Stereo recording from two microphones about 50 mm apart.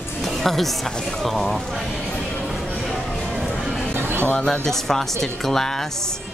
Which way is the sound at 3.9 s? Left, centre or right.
Right.